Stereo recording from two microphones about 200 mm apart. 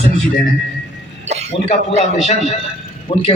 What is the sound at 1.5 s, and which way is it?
A man's voice, 35° left (ahead or behind).